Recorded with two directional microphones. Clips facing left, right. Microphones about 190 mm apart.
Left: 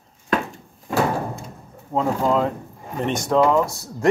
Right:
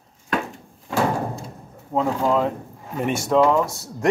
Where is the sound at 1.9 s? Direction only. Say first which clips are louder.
Even; centre (ahead or behind).